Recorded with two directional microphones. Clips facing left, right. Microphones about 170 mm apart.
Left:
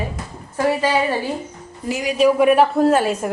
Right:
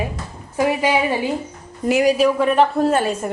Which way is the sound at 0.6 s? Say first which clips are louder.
Even; 15° right (ahead or behind).